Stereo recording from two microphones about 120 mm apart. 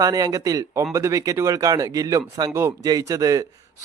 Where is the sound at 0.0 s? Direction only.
30° right (ahead or behind).